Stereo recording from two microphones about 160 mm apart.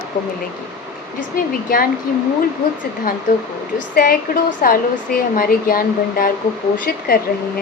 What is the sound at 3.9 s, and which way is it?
Speech, 65° left (ahead or behind).